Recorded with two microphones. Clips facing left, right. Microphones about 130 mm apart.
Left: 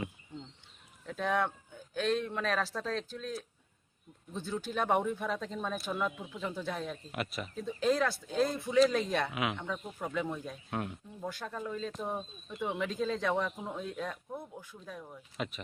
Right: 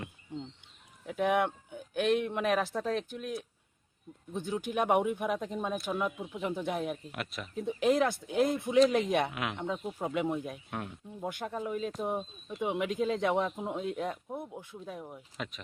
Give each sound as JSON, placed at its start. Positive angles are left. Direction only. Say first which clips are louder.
{"t": 1.0, "sound": "speech", "louder": "right 3 dB", "side_deg": -15}
{"t": 7.1, "sound": "speech", "louder": "left 2 dB", "side_deg": 0}
{"t": 7.5, "sound": "speech", "louder": "right 3 dB", "side_deg": -20}
{"t": 9.3, "sound": "speech", "louder": "left 2 dB", "side_deg": 5}
{"t": 9.6, "sound": "speech", "louder": "right 4 dB", "side_deg": -20}
{"t": 10.7, "sound": "speech", "louder": "left 2 dB", "side_deg": 0}
{"t": 11.2, "sound": "speech", "louder": "right 3 dB", "side_deg": -20}
{"t": 15.4, "sound": "speech", "louder": "left 3 dB", "side_deg": 0}